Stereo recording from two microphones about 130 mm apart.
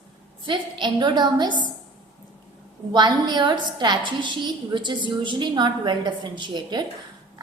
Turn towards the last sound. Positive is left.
turn(degrees=-35)  # may be behind; listen again after turning